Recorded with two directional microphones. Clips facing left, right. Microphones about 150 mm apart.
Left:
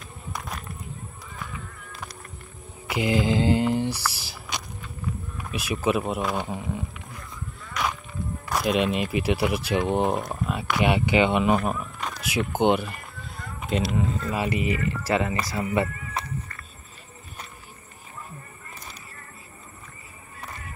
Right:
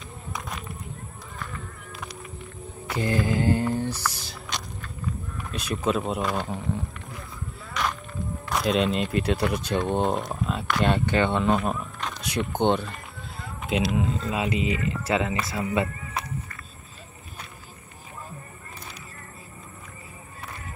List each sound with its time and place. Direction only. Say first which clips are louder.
0.3 s run: even; centre (ahead or behind)
2.9 s mantra: left 2 dB; 15° left (ahead or behind)
5.4 s speech: left 1 dB; 5° left (ahead or behind)
7.7 s a sound: even; 5° left (ahead or behind)
8.5 s speech: even; centre (ahead or behind)
14.7 s speech: left 1 dB; 20° right (ahead or behind)
15.3 s speech: even; centre (ahead or behind)